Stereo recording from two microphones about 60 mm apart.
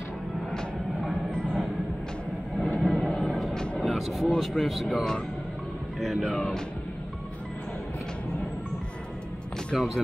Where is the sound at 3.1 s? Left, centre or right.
Centre.